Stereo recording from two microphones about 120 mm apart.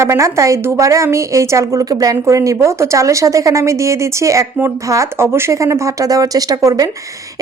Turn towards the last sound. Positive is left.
turn(degrees=-30)  # may be behind; listen again after turning